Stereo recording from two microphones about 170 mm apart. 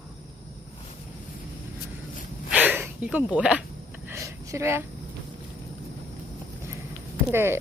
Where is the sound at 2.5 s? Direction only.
10° right (ahead or behind).